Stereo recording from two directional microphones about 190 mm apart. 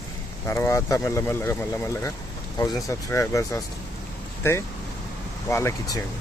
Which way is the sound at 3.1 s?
15° left (ahead or behind).